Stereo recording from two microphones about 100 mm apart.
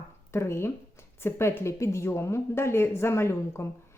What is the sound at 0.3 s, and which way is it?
Speech, 25° left (ahead or behind).